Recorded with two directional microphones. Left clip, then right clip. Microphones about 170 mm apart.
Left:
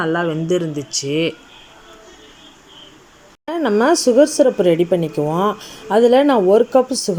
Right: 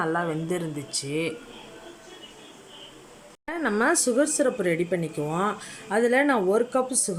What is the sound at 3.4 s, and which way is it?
Speech, 5° left (ahead or behind).